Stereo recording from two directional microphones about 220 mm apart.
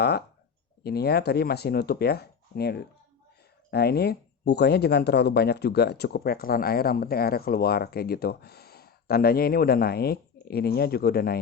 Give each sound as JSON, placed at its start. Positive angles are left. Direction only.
{"t": 0.0, "sound": "speech", "side_deg": 45}